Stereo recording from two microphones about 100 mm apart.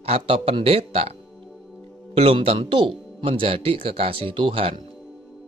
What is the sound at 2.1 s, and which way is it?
Speech, 75° right (ahead or behind).